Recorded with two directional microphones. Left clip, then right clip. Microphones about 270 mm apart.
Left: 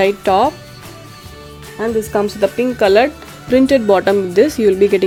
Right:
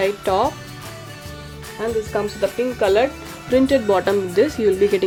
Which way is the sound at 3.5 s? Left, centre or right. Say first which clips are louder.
Left 5 dB; left.